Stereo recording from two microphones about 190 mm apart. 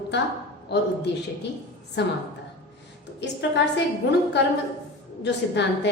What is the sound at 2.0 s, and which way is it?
Speech, 65° left (ahead or behind).